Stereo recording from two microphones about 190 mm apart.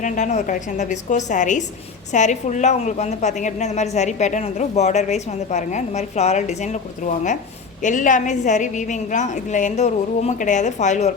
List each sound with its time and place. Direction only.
0.0 s a woman's voice: 40° left (ahead or behind)